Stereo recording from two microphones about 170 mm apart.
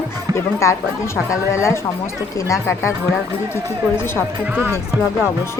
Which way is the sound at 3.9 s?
15° left (ahead or behind).